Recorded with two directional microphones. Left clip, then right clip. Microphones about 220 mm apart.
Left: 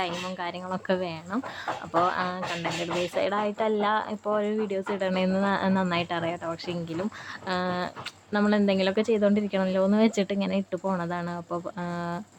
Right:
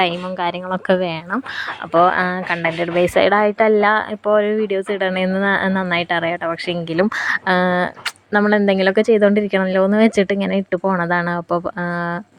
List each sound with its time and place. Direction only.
0.0 s speech: 30° right (ahead or behind)